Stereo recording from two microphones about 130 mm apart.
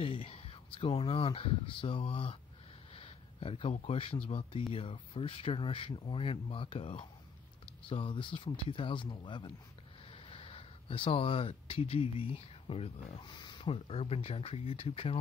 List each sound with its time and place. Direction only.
0.0 s speech: 50° left (ahead or behind)
2.9 s a sound: 45° left (ahead or behind)
3.8 s speech: 50° left (ahead or behind)
13.3 s speech: 35° left (ahead or behind)